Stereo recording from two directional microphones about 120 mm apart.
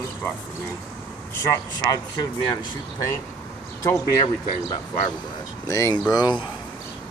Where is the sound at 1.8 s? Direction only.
35° left (ahead or behind).